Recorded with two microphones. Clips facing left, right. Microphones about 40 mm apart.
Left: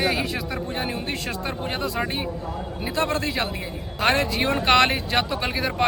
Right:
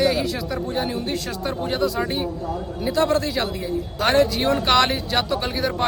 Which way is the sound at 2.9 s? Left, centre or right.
Left.